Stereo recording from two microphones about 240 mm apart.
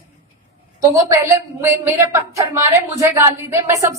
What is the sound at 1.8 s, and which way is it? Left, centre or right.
A woman's voice, centre.